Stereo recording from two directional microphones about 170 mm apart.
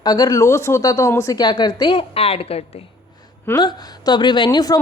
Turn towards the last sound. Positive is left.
turn(degrees=25)  # may be behind; listen again after turning